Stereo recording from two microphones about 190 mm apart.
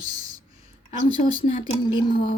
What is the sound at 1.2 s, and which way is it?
A woman's voice, 40° left (ahead or behind).